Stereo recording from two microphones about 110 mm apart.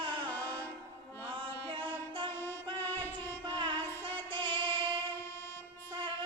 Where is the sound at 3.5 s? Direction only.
50° right (ahead or behind).